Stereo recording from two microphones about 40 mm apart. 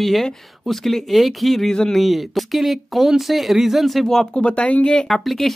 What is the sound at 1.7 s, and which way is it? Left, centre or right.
Speech, centre.